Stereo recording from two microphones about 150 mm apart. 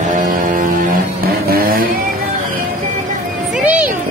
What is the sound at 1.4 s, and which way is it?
Vehicle, 90° right.